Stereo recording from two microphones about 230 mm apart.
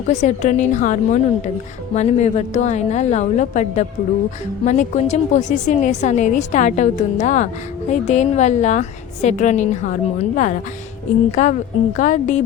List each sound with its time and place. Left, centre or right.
0.1 s a woman's voice: left